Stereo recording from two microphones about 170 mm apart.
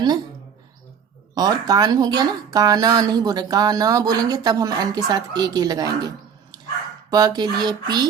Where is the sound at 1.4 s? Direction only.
20° right (ahead or behind).